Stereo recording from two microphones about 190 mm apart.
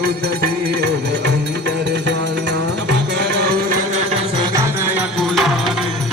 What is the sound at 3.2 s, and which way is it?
Music, 60° right (ahead or behind).